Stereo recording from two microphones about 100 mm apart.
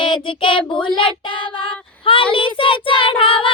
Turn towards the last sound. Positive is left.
turn(degrees=60)  # may be behind; listen again after turning